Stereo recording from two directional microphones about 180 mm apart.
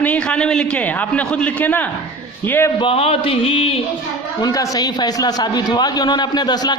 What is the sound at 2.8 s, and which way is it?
A man's voice, 30° left (ahead or behind).